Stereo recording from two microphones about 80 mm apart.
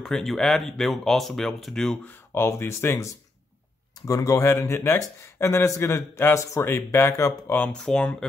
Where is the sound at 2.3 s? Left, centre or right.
Left.